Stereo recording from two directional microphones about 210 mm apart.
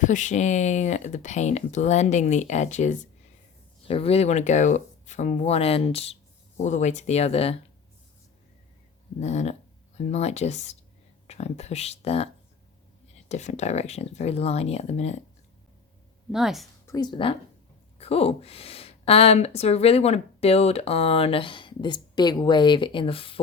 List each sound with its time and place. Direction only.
0.0 s speech: 35° left (ahead or behind)
9.2 s speech: 35° left (ahead or behind)
16.3 s speech: centre (ahead or behind)
16.8 s speech: 15° left (ahead or behind)